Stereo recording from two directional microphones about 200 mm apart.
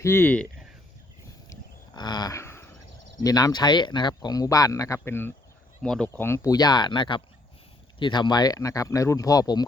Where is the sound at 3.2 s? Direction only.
20° left (ahead or behind).